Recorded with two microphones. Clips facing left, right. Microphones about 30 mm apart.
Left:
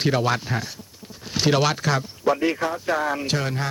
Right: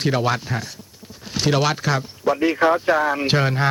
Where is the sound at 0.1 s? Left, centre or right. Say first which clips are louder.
Right 2 dB; centre.